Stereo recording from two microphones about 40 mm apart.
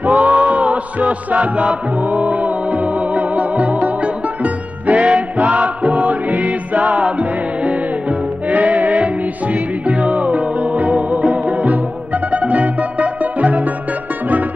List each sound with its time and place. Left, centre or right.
0.0 s music: right